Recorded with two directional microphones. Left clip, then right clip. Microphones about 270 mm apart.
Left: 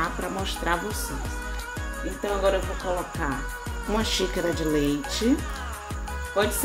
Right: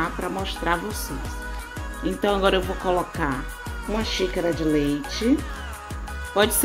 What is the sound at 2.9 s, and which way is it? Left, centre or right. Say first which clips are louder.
Speech: right 6 dB; right.